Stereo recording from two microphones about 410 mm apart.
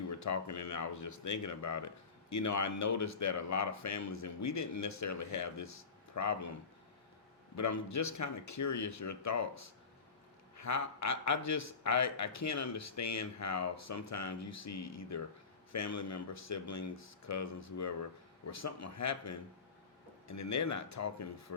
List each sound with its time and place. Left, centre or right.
0.1 s speech: left
7.5 s speech: left